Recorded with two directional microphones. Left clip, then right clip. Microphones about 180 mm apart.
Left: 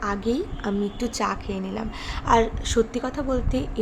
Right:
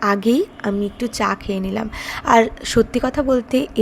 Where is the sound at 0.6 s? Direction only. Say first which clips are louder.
Right 5 dB; 15° right (ahead or behind).